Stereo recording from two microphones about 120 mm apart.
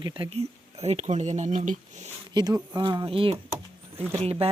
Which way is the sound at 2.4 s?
35° right (ahead or behind).